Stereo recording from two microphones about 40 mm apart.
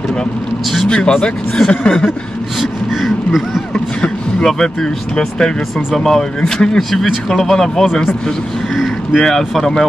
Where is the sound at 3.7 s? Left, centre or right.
Left.